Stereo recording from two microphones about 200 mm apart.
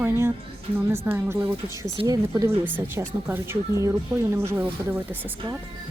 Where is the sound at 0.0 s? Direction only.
15° right (ahead or behind).